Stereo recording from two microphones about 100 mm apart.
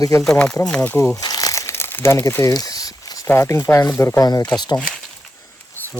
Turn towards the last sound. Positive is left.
turn(degrees=20)  # may be behind; listen again after turning